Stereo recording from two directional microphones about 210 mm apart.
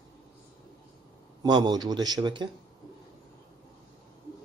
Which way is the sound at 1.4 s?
20° right (ahead or behind).